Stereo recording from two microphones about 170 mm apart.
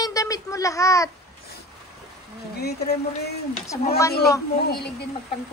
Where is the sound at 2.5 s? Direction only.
70° left (ahead or behind).